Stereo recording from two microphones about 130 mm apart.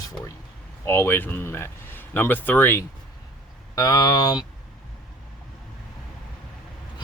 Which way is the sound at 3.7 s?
30° left (ahead or behind).